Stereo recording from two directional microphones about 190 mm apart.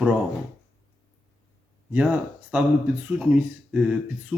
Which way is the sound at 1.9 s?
10° right (ahead or behind).